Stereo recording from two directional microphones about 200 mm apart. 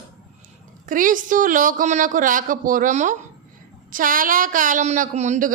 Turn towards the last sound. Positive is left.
turn(degrees=-35)  # may be behind; listen again after turning